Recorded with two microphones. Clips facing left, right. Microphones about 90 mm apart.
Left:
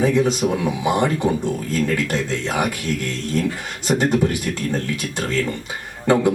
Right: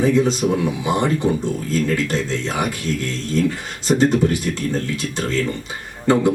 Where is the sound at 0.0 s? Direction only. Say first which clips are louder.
Right 1 dB; 60° left (ahead or behind).